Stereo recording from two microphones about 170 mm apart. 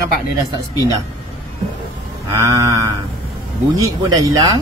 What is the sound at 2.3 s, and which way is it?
Speech, 20° right (ahead or behind).